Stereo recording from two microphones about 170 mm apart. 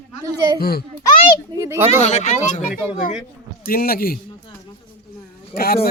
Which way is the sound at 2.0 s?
40° left (ahead or behind).